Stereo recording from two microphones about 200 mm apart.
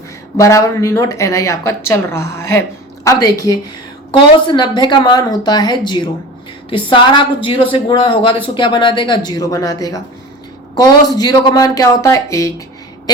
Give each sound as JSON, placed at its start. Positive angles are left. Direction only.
{"t": 0.3, "sound": "speech", "side_deg": 15}